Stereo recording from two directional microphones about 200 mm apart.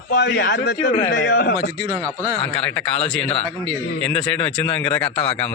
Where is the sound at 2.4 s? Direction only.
5° left (ahead or behind).